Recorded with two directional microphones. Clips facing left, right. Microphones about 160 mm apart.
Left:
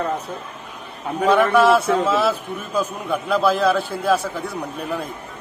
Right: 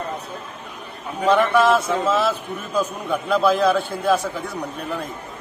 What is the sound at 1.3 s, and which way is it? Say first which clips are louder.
A man's voice: left 1 dB; 5° left (ahead or behind).